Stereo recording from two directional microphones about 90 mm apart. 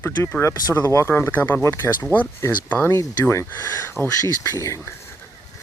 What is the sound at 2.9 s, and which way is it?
Speech, 30° left (ahead or behind).